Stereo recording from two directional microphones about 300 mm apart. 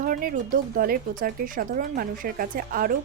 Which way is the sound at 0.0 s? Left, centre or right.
Right.